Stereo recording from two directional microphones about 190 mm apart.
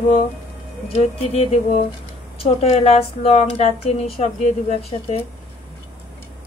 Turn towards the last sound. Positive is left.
turn(degrees=35)  # may be behind; listen again after turning